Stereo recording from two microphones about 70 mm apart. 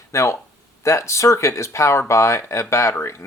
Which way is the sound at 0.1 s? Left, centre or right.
Left.